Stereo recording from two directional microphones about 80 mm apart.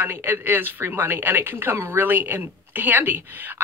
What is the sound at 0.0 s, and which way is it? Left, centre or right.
Speech, right.